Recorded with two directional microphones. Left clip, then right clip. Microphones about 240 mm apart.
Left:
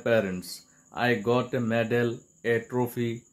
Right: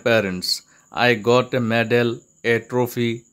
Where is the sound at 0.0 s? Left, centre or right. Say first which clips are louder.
Right 6 dB; right.